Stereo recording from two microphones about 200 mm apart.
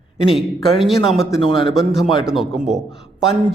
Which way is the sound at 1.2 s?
20° left (ahead or behind).